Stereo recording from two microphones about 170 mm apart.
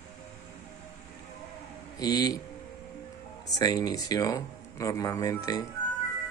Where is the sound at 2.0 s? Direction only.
25° left (ahead or behind).